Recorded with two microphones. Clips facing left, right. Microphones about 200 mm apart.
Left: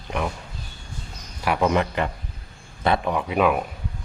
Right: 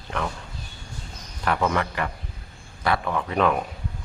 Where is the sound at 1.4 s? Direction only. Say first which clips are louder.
Left 3 dB; 15° left (ahead or behind).